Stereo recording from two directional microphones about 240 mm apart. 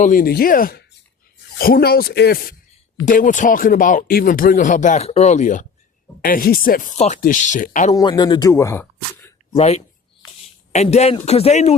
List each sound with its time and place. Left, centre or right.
0.0 s speech: left
7.9 s speech: centre
9.5 s speech: left